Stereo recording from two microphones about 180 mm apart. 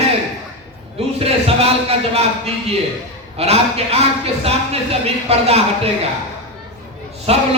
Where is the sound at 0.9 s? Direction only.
35° right (ahead or behind).